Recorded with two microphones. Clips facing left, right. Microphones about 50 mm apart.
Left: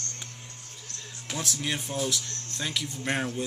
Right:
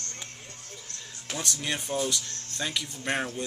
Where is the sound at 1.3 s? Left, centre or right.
Centre.